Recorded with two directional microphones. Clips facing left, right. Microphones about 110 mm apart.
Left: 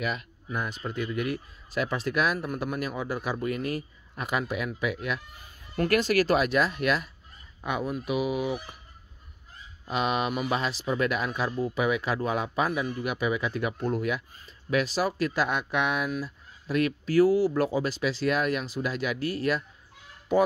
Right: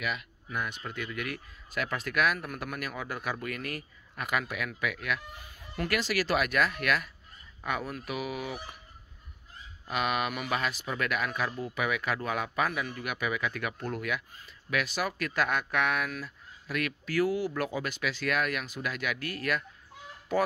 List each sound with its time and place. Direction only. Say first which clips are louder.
0.0 s speech: left 3 dB; 35° left (ahead or behind)
5.8 s speech: left 7 dB; 45° left (ahead or behind)
6.3 s speech: left 4 dB; 25° left (ahead or behind)
9.8 s speech: left 3 dB; 25° left (ahead or behind)